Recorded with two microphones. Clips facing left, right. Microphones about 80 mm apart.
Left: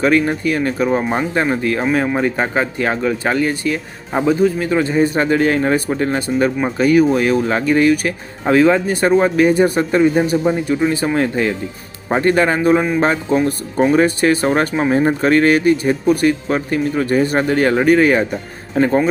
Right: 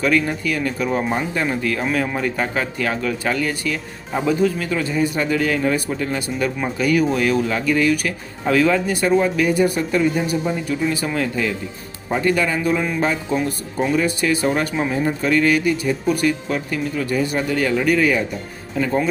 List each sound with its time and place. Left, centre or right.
0.0 s speech: left
13.9 s speech: left